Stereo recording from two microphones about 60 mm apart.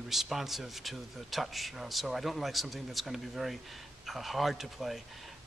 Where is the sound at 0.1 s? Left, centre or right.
Centre.